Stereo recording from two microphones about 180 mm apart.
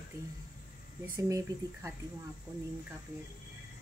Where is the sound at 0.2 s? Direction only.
15° right (ahead or behind).